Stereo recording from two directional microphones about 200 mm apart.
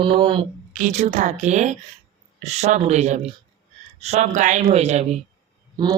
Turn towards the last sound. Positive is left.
turn(degrees=-20)  # may be behind; listen again after turning